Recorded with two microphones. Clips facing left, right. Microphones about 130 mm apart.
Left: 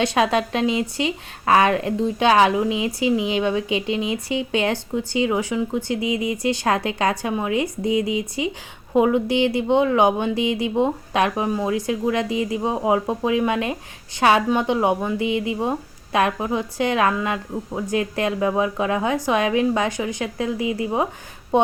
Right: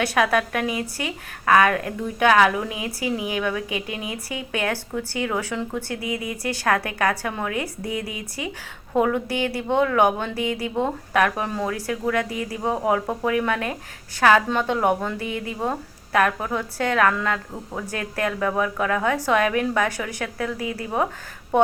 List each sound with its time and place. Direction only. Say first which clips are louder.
0.0 s a woman's voice: left 2 dB; 25° left (ahead or behind)